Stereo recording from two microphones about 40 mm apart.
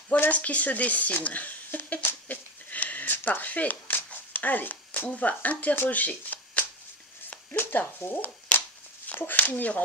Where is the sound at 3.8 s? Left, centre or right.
Left.